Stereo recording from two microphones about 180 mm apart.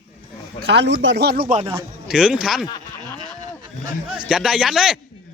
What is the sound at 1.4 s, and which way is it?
Speech, 40° right (ahead or behind).